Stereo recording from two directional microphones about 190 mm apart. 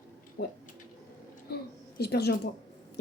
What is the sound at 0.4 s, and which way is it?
Speech, 60° left (ahead or behind).